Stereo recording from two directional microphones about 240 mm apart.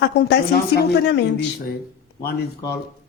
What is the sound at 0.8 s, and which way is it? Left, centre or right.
Speech, left.